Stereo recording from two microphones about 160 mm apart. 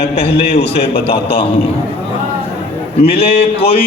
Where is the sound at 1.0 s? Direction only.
35° left (ahead or behind).